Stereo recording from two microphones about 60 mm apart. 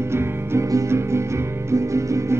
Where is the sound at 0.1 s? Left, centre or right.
Right.